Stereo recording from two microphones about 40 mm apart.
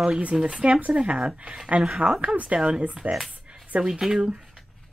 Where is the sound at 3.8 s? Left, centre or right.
Centre.